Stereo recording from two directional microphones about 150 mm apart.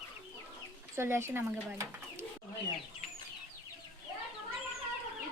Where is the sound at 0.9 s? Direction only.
15° right (ahead or behind).